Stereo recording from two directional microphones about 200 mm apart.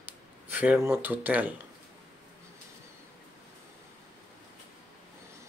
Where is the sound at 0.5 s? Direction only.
5° right (ahead or behind).